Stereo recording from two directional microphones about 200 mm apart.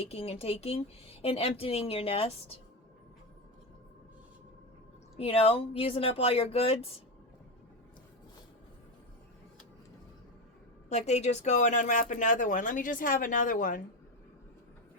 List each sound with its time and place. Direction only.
0.0 s speech: 30° left (ahead or behind)
5.1 s speech: 30° left (ahead or behind)
10.8 s speech: 35° left (ahead or behind)